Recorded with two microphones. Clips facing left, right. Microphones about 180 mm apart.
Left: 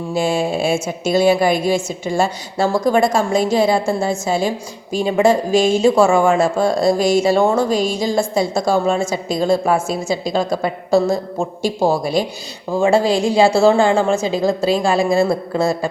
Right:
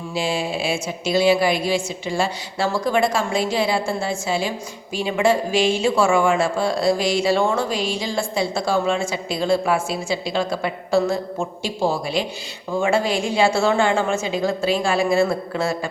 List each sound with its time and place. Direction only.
0.1 s a woman's voice: 45° left (ahead or behind)